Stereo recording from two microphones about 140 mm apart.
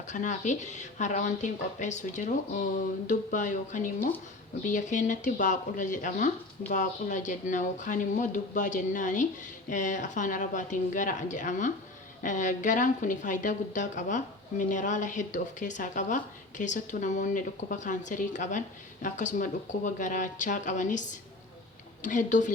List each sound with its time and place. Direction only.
0.1 s speech: 60° left (ahead or behind)